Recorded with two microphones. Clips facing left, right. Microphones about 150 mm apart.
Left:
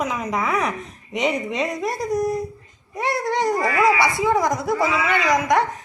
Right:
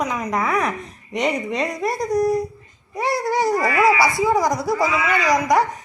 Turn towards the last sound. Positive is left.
turn(degrees=0)  # may be behind; listen again after turning